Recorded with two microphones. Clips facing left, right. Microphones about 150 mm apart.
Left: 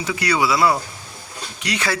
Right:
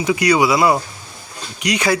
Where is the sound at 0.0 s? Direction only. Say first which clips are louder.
Right 6 dB; 15° right (ahead or behind).